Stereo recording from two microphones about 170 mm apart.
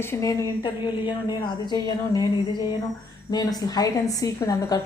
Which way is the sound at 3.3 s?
25° left (ahead or behind).